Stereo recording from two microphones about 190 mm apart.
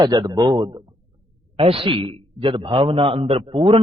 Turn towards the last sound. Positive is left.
turn(degrees=-30)  # may be behind; listen again after turning